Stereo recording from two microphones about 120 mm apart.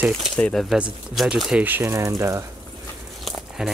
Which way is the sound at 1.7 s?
20° right (ahead or behind).